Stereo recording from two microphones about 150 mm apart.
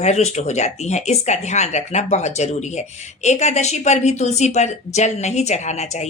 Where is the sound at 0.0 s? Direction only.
45° left (ahead or behind).